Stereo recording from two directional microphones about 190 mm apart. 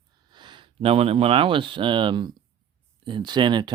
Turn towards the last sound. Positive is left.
turn(degrees=-25)  # may be behind; listen again after turning